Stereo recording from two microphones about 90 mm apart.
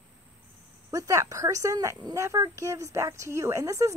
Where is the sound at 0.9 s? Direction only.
35° right (ahead or behind).